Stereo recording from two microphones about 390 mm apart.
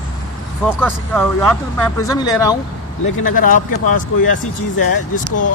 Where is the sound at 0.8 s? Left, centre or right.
Centre.